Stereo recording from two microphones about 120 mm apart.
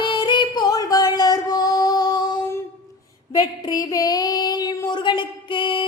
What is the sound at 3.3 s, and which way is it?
Female singing, 30° left (ahead or behind).